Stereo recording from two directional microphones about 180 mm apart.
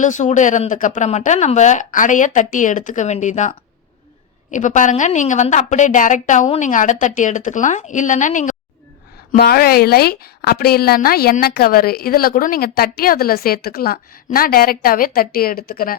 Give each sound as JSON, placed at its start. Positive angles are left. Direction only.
{"t": 0.0, "sound": "a woman's voice", "side_deg": 45}
{"t": 4.5, "sound": "a woman's voice", "side_deg": 45}
{"t": 9.4, "sound": "a woman's voice", "side_deg": 60}